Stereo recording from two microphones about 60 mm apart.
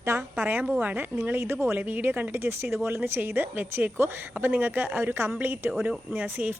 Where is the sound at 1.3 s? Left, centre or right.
Right.